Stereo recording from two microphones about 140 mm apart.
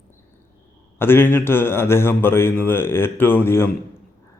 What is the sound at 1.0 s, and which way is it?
Speech, 15° left (ahead or behind).